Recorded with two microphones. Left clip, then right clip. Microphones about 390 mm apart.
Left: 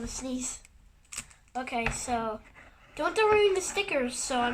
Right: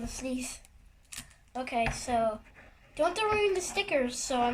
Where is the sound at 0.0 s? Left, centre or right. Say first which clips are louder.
Left 1 dB; centre.